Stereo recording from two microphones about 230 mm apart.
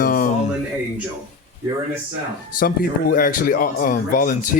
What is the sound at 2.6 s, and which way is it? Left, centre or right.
Speech, left.